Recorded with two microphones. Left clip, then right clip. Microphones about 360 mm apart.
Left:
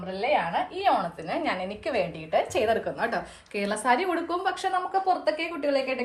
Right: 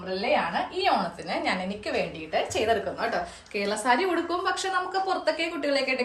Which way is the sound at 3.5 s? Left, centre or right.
Left.